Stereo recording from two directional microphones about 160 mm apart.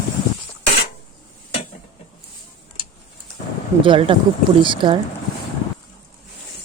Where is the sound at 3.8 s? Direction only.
35° right (ahead or behind).